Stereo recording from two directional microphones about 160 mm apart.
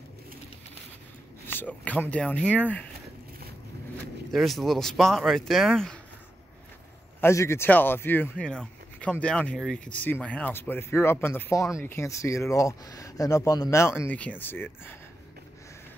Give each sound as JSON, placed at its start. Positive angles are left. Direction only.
{"t": 1.5, "sound": "speech", "side_deg": 10}
{"t": 4.3, "sound": "speech", "side_deg": 0}
{"t": 7.2, "sound": "speech", "side_deg": 15}